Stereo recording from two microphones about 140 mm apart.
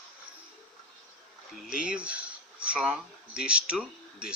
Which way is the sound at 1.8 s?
5° right (ahead or behind).